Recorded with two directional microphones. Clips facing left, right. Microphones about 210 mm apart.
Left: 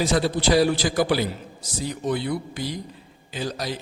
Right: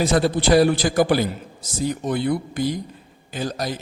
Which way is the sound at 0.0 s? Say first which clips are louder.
Right 3 dB; 55° right (ahead or behind).